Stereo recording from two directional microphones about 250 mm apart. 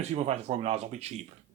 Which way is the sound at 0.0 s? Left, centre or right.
Right.